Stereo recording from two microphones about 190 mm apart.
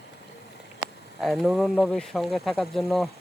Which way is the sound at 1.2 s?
Centre (ahead or behind).